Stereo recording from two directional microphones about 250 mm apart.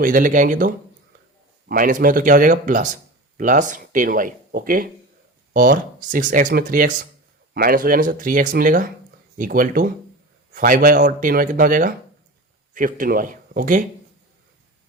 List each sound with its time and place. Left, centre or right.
0.0 s speech: right